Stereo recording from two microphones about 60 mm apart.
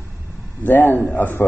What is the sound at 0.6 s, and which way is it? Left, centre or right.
Speech, left.